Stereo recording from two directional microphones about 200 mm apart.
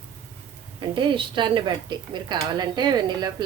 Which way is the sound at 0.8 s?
25° right (ahead or behind).